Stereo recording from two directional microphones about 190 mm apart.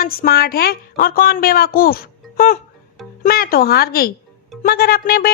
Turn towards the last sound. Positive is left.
turn(degrees=50)  # may be behind; listen again after turning